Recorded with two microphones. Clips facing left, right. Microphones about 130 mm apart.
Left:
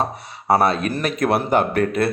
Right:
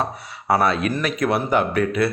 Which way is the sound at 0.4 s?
40° left (ahead or behind).